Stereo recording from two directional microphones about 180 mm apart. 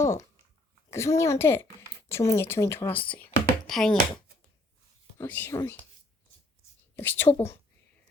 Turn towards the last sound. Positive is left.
turn(degrees=10)  # may be behind; listen again after turning